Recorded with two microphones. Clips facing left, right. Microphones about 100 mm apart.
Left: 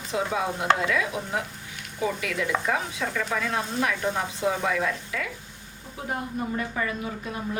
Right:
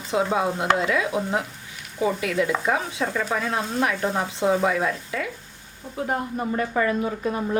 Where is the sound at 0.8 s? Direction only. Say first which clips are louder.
Right 3 dB; 25° right (ahead or behind).